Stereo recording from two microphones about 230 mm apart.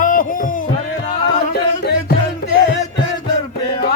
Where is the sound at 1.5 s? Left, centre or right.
Left.